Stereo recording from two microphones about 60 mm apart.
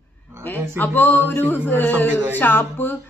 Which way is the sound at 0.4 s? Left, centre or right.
Left.